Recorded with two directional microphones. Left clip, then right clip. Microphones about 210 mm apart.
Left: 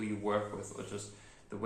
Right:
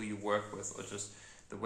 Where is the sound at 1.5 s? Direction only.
40° right (ahead or behind).